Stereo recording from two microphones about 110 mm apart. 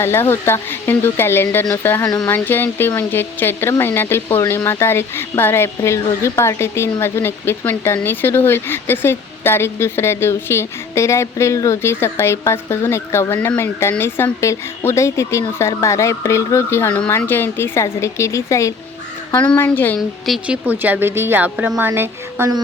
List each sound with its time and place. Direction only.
0.0 s a woman's voice: 20° left (ahead or behind)
19.3 s a woman's voice: 10° left (ahead or behind)
20.0 s a woman's voice: 5° right (ahead or behind)
20.7 s speech: 15° right (ahead or behind)